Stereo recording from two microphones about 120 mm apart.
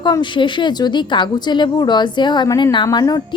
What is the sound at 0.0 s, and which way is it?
A woman's voice, 40° left (ahead or behind).